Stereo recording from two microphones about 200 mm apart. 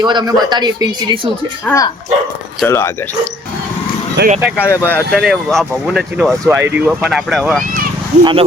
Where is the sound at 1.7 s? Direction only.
15° left (ahead or behind).